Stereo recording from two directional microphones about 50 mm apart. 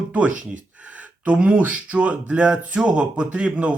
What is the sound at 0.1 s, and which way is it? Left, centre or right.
Speech, right.